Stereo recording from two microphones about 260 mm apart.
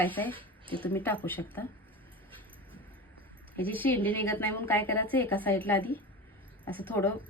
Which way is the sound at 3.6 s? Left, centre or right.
Centre.